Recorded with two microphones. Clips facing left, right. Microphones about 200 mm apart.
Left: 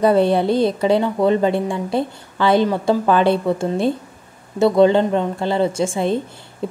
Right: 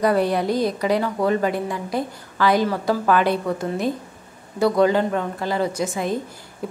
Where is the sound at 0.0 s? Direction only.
25° left (ahead or behind).